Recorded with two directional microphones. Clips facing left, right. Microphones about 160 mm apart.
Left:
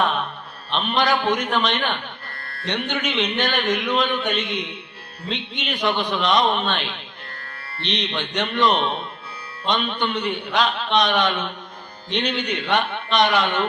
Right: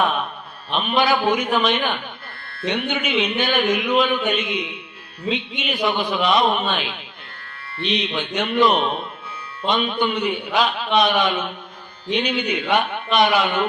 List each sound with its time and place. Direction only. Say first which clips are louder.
0.0 s mantra: right 1 dB; 5° right (ahead or behind)
0.7 s a man's voice: right 2 dB; 5° right (ahead or behind)
2.4 s music: right 2 dB; 40° left (ahead or behind)
2.6 s a man's voice: right 2 dB; 5° right (ahead or behind)